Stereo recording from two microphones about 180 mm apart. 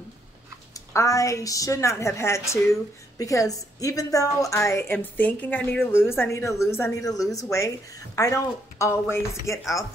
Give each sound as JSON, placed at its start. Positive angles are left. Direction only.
{"t": 0.7, "sound": "a woman's voice", "side_deg": 15}